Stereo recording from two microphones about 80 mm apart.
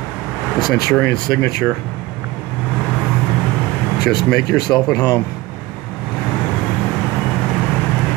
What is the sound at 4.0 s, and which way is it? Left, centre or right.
Speech, left.